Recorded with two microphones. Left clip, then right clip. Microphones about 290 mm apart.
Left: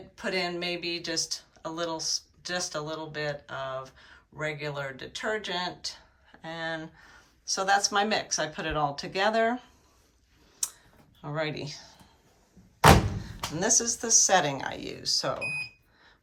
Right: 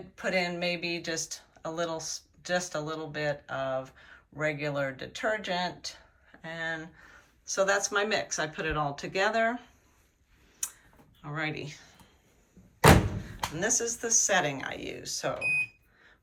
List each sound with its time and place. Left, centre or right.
0.2 s speech: centre
10.6 s clicking: centre
11.2 s speech: centre
13.2 s speech: centre